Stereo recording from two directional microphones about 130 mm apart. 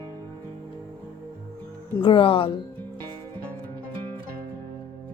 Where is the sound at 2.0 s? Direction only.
40° left (ahead or behind).